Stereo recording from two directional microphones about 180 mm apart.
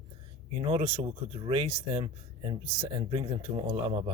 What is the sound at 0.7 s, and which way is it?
Speech, 30° right (ahead or behind).